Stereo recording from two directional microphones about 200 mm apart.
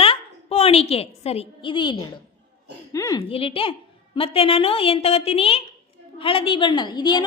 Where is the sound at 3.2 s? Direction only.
30° left (ahead or behind).